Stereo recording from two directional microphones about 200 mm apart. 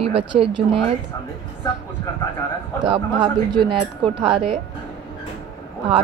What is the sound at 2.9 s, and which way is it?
Speech, 25° right (ahead or behind).